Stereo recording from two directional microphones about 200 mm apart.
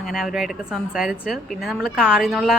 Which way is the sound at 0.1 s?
Centre (ahead or behind).